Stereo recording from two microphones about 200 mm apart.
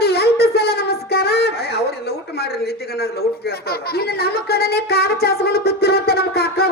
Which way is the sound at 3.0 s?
50° left (ahead or behind).